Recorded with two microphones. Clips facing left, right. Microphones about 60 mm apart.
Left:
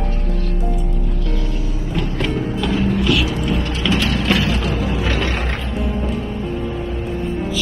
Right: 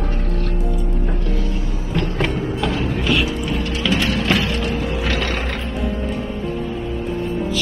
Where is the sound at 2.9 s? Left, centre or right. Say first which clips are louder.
Left 1 dB; centre.